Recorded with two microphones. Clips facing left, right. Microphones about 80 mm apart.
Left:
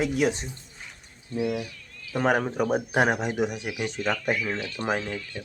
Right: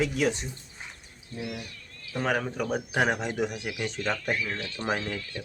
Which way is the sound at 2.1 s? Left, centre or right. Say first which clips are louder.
Left 5 dB; left.